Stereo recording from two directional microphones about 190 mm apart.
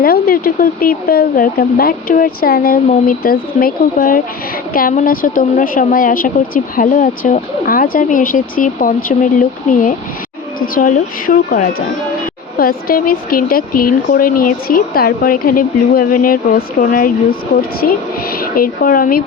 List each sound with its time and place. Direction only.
0.0 s speech: 50° left (ahead or behind)
10.8 s speech: 45° left (ahead or behind)